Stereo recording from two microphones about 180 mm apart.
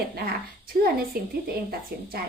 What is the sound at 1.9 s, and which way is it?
Speech, 60° right (ahead or behind).